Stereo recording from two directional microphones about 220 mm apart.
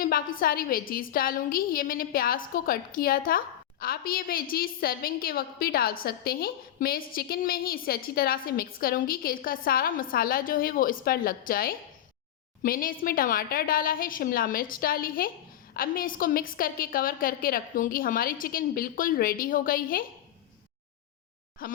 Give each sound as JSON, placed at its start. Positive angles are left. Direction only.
{"t": 0.0, "sound": "a woman's voice", "side_deg": 40}
{"t": 21.6, "sound": "a woman's voice", "side_deg": 40}